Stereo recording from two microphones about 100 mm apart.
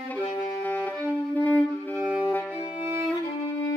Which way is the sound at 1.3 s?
20° left (ahead or behind).